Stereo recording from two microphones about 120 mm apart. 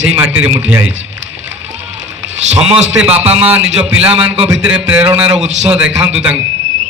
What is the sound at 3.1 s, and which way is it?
Speech, 60° right (ahead or behind).